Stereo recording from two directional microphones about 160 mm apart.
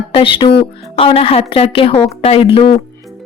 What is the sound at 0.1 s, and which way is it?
Speech, 35° left (ahead or behind).